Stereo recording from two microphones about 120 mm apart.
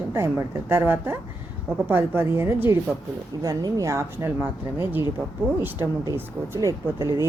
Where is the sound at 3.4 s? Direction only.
30° right (ahead or behind).